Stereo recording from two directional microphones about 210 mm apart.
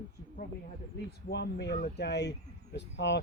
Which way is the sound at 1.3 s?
55° left (ahead or behind).